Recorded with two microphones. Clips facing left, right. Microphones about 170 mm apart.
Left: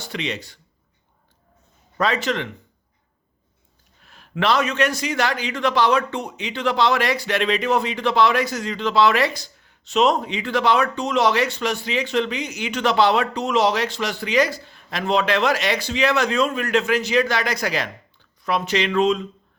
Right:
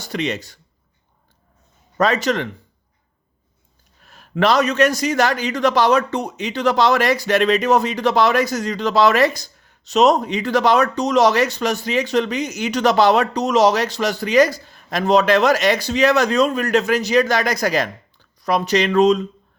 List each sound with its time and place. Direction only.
0.0 s speech: 45° right (ahead or behind)
2.0 s a man's voice: 40° right (ahead or behind)
4.0 s a man's voice: 45° right (ahead or behind)